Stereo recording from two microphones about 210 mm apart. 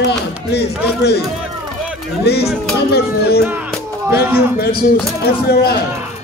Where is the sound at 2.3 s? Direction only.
50° left (ahead or behind).